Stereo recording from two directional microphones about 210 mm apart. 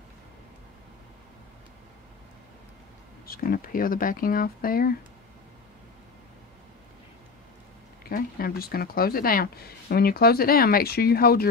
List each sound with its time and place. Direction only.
3.3 s speech: 45° left (ahead or behind)
8.0 s speech: 45° left (ahead or behind)